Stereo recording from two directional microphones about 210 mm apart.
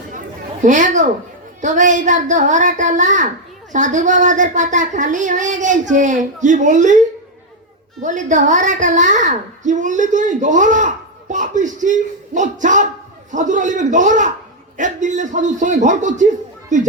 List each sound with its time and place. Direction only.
0.6 s a woman's voice: 35° right (ahead or behind)
8.0 s a woman's voice: 35° right (ahead or behind)